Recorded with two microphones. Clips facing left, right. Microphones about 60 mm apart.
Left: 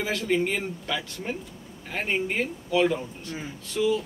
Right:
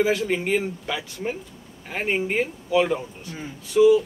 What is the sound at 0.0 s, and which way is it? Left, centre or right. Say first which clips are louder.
Speech: right 3 dB; centre.